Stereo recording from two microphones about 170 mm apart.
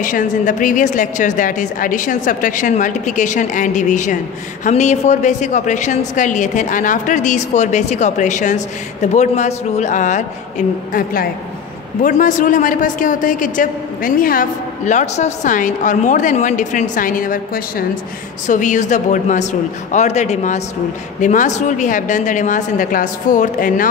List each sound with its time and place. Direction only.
0.0 s a woman's voice: 50° left (ahead or behind)
10.9 s a woman's voice: 55° left (ahead or behind)